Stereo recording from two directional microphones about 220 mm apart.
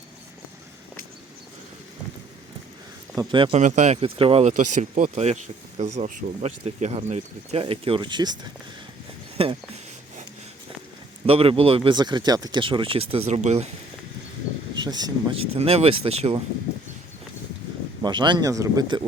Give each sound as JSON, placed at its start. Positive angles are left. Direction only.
{"t": 3.2, "sound": "speech", "side_deg": -20}
{"t": 3.6, "sound": "speech", "side_deg": -30}
{"t": 9.4, "sound": "speech", "side_deg": -25}
{"t": 11.3, "sound": "speech", "side_deg": -25}
{"t": 14.8, "sound": "speech", "side_deg": -20}
{"t": 18.0, "sound": "speech", "side_deg": -20}